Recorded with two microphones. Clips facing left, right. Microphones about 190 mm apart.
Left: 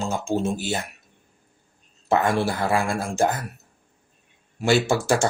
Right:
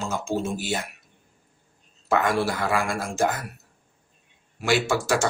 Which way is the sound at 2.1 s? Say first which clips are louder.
Left 2 dB; 25° left (ahead or behind).